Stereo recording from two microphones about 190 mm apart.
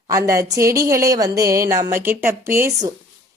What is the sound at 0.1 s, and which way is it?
Speech, 15° right (ahead or behind).